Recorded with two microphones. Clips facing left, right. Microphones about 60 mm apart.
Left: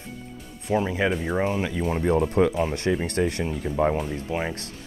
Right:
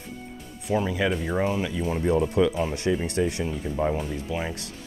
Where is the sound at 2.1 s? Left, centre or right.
Left.